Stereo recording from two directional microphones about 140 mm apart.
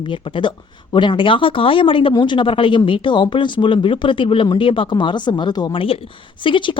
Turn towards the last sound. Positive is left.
turn(degrees=35)  # may be behind; listen again after turning